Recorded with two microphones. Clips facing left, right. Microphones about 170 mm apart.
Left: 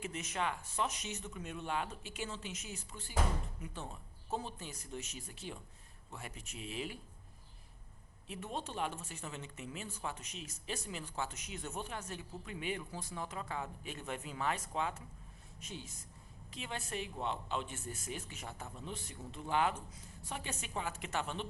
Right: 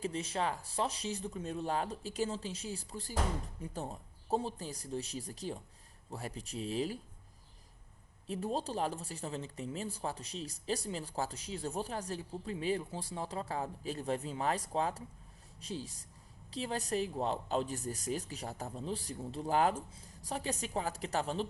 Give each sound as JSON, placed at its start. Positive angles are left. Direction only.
{"t": 0.0, "sound": "speech", "side_deg": -30}
{"t": 8.3, "sound": "speech", "side_deg": -35}